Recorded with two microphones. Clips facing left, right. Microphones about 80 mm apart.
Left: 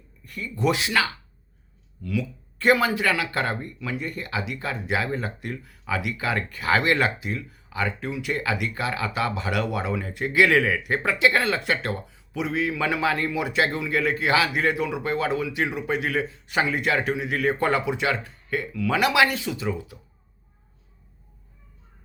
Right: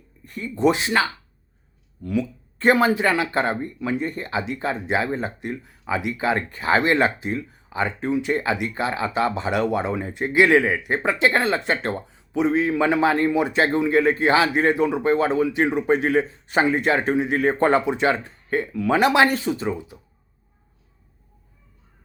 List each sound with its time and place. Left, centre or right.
0.3 s speech: right